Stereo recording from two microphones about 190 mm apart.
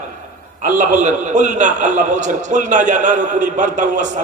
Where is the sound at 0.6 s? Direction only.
40° right (ahead or behind).